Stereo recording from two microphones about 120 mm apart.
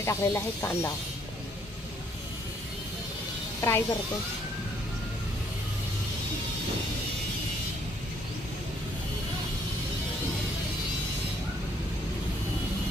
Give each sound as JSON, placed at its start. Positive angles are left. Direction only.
{"t": 0.0, "sound": "speech", "side_deg": 25}
{"t": 3.6, "sound": "speech", "side_deg": 20}